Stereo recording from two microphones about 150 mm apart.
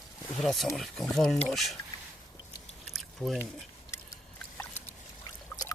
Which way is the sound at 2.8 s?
Centre (ahead or behind).